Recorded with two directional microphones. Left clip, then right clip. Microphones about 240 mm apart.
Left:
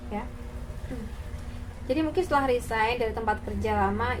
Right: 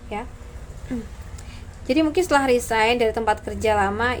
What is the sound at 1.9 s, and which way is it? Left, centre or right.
A woman's voice, right.